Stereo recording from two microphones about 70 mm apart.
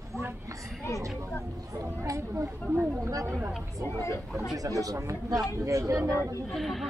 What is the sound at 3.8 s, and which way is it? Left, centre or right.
Speech, left.